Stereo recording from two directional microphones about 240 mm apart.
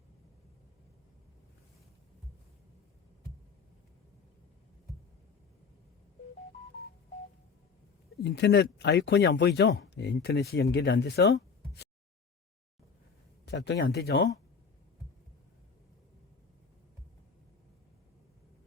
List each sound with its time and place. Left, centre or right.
8.2 s speech: left
13.4 s speech: left